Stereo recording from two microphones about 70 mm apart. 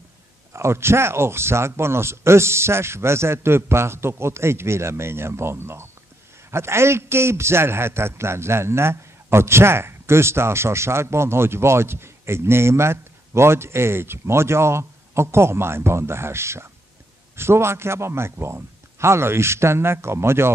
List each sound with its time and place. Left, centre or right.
0.5 s a man's voice: right